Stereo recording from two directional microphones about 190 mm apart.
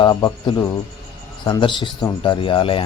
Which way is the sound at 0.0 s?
25° left (ahead or behind).